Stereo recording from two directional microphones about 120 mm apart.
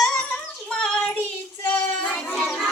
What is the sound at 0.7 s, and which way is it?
Child singing, 5° left (ahead or behind).